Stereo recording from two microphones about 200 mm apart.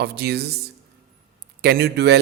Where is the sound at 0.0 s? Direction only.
55° right (ahead or behind).